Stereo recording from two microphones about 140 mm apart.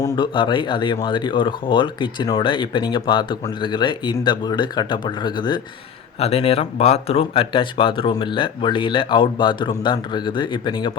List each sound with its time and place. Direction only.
0.0 s speech: 35° left (ahead or behind)
6.1 s speech: 45° left (ahead or behind)